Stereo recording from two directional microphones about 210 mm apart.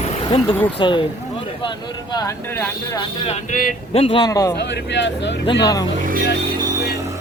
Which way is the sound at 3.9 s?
25° left (ahead or behind).